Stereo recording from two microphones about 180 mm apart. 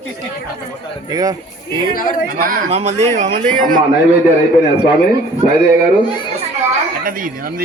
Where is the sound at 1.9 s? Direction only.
50° left (ahead or behind).